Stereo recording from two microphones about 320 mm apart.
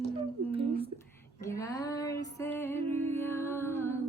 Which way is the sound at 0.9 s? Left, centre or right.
Centre.